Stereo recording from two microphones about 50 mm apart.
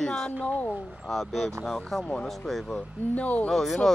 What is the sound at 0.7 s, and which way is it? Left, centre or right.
Speech, centre.